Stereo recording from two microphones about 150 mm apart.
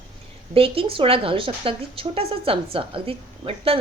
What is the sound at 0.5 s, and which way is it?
A woman's voice, 40° right (ahead or behind).